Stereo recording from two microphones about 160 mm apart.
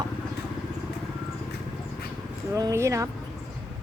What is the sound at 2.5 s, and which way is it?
Speech, 20° right (ahead or behind).